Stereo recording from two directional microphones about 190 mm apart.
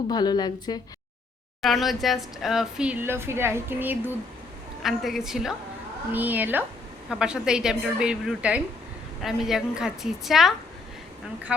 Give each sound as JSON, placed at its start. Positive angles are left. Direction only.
{"t": 0.1, "sound": "a woman's voice", "side_deg": 20}
{"t": 1.6, "sound": "a woman's voice", "side_deg": 0}